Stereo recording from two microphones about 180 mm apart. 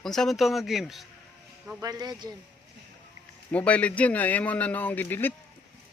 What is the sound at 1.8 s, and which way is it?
Speech, 20° right (ahead or behind).